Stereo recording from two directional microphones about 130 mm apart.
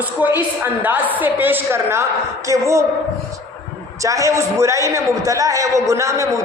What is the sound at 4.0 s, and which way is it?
A man's voice, 25° right (ahead or behind).